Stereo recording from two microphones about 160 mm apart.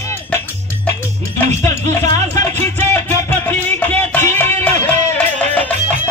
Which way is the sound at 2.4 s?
15° left (ahead or behind).